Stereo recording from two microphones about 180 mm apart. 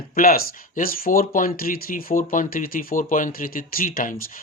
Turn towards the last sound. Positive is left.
turn(degrees=50)  # may be behind; listen again after turning